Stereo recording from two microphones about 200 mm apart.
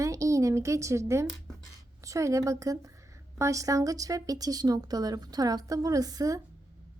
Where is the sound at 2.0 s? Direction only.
15° right (ahead or behind).